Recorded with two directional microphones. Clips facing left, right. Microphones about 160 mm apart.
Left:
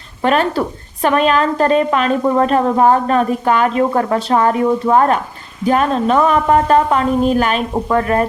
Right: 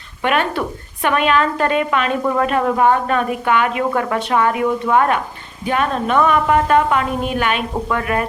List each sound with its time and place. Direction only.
0.2 s a woman's voice: 35° left (ahead or behind)